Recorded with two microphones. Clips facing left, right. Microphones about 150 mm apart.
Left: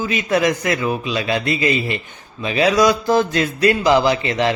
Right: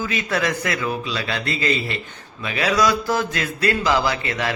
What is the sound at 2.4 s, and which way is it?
Mantra, 25° left (ahead or behind).